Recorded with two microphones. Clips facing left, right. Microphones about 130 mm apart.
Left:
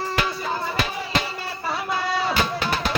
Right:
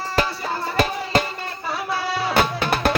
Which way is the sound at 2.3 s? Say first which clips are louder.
Right 3 dB; 60° right (ahead or behind).